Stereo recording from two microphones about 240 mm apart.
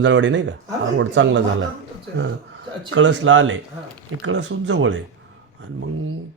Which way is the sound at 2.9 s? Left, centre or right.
Right.